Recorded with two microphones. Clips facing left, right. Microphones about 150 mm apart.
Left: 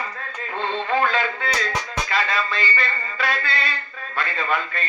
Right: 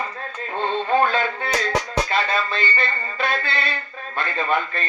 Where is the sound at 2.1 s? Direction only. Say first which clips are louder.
Left 2 dB; 25° right (ahead or behind).